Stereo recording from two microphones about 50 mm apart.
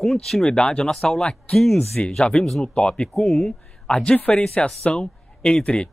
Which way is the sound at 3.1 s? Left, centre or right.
Centre.